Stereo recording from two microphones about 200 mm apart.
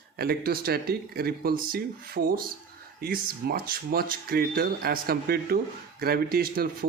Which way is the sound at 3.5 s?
50° right (ahead or behind).